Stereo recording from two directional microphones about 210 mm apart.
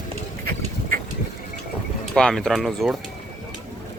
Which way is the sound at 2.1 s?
5° left (ahead or behind).